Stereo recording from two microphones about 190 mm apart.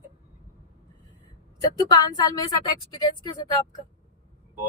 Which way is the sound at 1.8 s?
20° left (ahead or behind).